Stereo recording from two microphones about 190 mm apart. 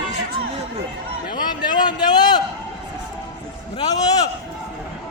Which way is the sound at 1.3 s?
20° left (ahead or behind).